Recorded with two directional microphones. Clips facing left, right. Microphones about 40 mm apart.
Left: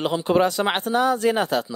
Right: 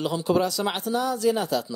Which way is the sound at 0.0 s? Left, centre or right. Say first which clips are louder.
Left 4 dB; left.